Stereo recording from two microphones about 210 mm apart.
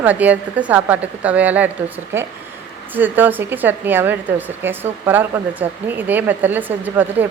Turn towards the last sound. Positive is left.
turn(degrees=-10)  # may be behind; listen again after turning